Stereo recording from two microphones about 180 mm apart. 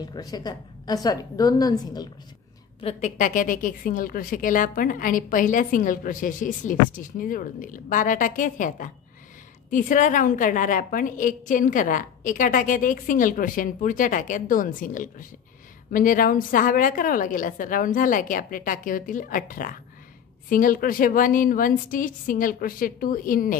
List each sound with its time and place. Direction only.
0.0 s a woman's voice: 20° left (ahead or behind)
2.8 s a woman's voice: 40° left (ahead or behind)